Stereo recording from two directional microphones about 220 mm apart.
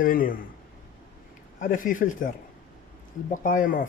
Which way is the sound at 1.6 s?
35° left (ahead or behind).